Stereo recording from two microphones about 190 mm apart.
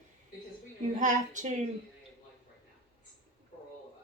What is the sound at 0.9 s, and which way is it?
Speech, 40° right (ahead or behind).